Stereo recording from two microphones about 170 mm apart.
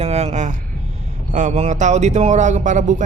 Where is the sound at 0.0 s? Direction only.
40° right (ahead or behind).